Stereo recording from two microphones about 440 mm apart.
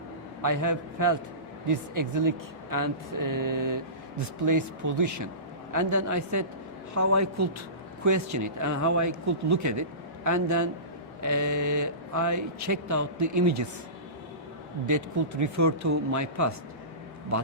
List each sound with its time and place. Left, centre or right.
0.4 s speech: right
14.8 s speech: right